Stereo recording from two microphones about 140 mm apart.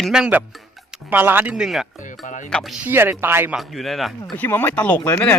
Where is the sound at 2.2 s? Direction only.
65° left (ahead or behind).